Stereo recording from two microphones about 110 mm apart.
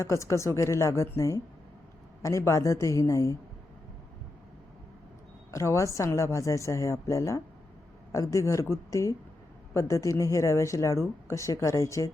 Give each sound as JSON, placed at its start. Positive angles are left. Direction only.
{"t": 0.0, "sound": "speech", "side_deg": 25}
{"t": 5.5, "sound": "speech", "side_deg": 25}